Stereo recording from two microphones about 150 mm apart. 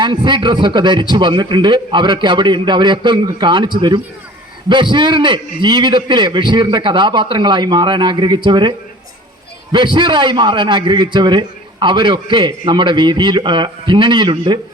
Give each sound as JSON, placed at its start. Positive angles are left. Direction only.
{"t": 0.0, "sound": "a man's voice", "side_deg": -30}
{"t": 9.7, "sound": "a man's voice", "side_deg": -30}